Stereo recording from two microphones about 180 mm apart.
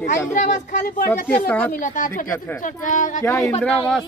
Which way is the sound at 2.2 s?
15° left (ahead or behind).